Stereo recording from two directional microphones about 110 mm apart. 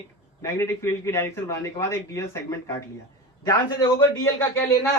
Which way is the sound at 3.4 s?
35° left (ahead or behind).